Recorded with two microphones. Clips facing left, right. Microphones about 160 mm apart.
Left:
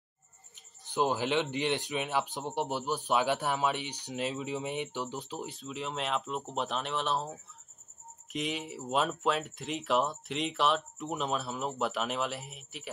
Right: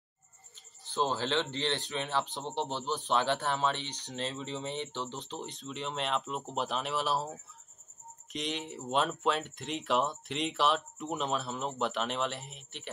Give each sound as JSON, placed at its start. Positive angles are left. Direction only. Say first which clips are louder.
{"t": 0.6, "sound": "speech", "louder": "left 2 dB", "side_deg": 15}